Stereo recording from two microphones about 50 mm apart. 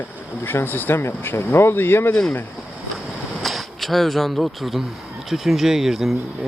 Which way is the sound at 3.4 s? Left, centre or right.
Centre.